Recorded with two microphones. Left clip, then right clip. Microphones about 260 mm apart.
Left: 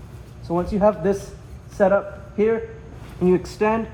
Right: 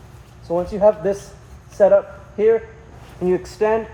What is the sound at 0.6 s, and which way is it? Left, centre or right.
Speech, left.